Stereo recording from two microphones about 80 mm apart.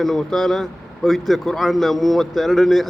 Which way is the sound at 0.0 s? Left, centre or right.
Centre.